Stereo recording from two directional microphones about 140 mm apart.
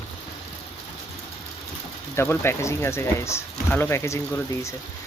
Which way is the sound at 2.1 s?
15° left (ahead or behind).